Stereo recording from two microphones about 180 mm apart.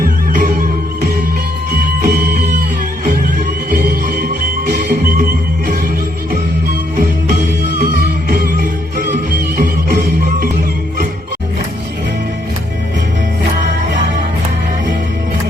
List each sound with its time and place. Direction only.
0.0 s music: 50° right (ahead or behind)
1.7 s music: 55° right (ahead or behind)
6.9 s music: 50° right (ahead or behind)